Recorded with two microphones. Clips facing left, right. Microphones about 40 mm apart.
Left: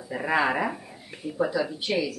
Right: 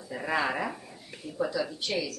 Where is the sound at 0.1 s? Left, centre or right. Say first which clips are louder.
Left 5 dB; centre.